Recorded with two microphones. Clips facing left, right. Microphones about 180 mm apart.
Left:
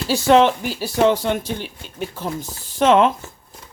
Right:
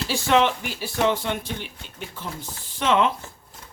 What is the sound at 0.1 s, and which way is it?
Speech, 40° left (ahead or behind).